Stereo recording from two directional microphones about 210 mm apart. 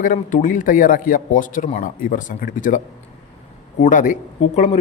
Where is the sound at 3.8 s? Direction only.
35° left (ahead or behind).